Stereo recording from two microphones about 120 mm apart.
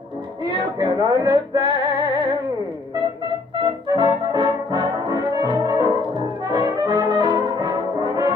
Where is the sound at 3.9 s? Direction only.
40° right (ahead or behind).